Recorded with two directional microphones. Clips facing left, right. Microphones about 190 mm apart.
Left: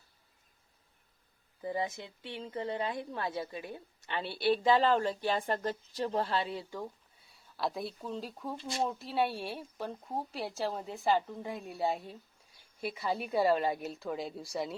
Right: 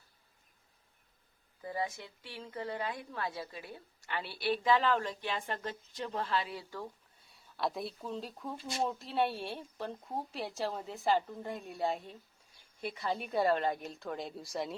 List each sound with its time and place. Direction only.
1.6 s a woman's voice: 20° left (ahead or behind)
7.3 s speech: centre (ahead or behind)